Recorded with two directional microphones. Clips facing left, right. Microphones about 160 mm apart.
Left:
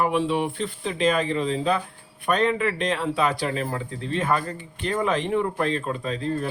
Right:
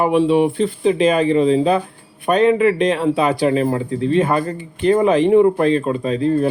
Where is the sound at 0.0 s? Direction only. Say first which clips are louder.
Right 8 dB; 20° right (ahead or behind).